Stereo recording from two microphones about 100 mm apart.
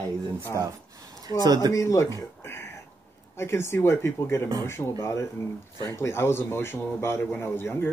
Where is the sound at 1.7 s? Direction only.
30° left (ahead or behind).